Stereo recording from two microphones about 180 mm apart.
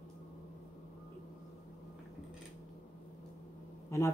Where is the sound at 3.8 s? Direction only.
15° left (ahead or behind).